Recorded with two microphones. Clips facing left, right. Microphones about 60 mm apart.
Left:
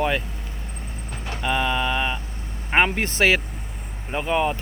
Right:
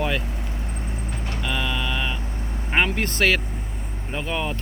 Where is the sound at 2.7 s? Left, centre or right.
Centre.